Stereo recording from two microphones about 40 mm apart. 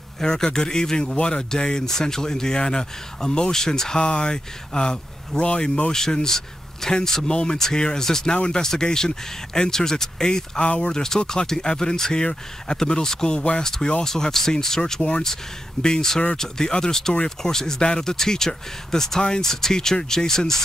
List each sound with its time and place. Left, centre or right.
0.2 s speech: centre
10.6 s speech: left
11.0 s speech: centre
14.9 s speech: left